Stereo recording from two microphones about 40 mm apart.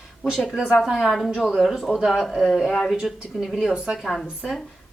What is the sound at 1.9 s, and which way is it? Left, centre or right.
Speech, centre.